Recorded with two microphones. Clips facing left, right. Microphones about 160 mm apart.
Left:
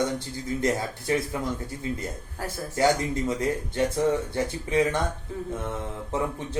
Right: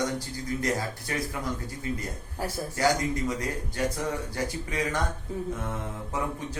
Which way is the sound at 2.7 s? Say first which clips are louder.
Left 3 dB; 25° left (ahead or behind).